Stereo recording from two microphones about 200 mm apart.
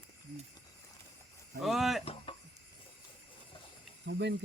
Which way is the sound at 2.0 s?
25° left (ahead or behind).